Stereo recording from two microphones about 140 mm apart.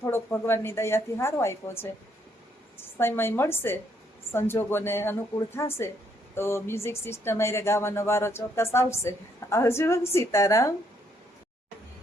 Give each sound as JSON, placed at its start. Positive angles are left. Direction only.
{"t": 0.1, "sound": "a woman's voice", "side_deg": 15}